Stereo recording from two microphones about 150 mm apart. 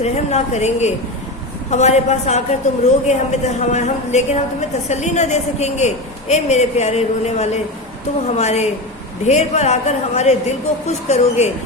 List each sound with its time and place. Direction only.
0.0 s a man's voice: 45° left (ahead or behind)